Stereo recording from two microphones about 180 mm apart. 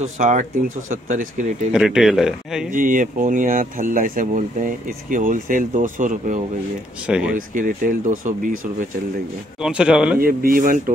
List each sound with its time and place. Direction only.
0.0 s speech: 45° right (ahead or behind)
1.7 s speech: 5° right (ahead or behind)
2.7 s speech: 50° right (ahead or behind)
7.1 s speech: 5° right (ahead or behind)
7.3 s speech: 50° right (ahead or behind)
9.6 s speech: 5° right (ahead or behind)
10.2 s speech: 55° right (ahead or behind)